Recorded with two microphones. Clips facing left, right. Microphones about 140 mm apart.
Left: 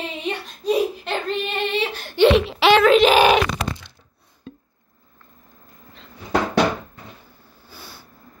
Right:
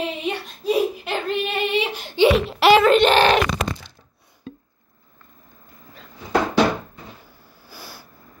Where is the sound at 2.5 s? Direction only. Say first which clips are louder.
Even; 5° right (ahead or behind).